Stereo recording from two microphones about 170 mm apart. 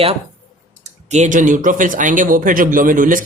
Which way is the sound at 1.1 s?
45° right (ahead or behind).